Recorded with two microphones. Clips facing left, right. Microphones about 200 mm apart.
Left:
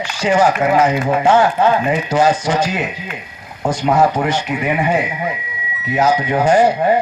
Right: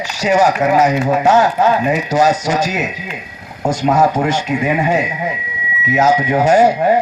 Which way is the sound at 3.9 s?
45° right (ahead or behind).